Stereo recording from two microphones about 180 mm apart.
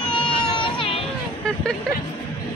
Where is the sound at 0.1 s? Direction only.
25° left (ahead or behind).